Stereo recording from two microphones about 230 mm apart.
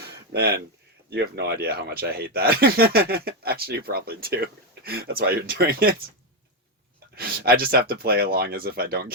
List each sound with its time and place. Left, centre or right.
1.1 s speech: right
7.2 s speech: right